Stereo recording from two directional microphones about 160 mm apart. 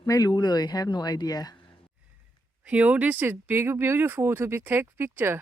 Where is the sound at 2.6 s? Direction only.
10° right (ahead or behind).